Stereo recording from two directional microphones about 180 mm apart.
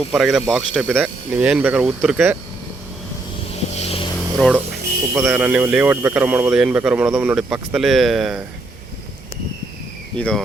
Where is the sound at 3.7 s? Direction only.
35° left (ahead or behind).